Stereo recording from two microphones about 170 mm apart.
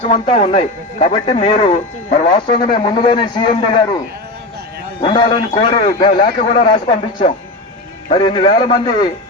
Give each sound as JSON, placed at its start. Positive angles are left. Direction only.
{"t": 0.0, "sound": "speech", "side_deg": 35}
{"t": 2.6, "sound": "a man's voice", "side_deg": 30}
{"t": 4.9, "sound": "speech", "side_deg": 30}
{"t": 6.1, "sound": "a man's voice", "side_deg": 45}
{"t": 8.1, "sound": "a man's voice", "side_deg": 30}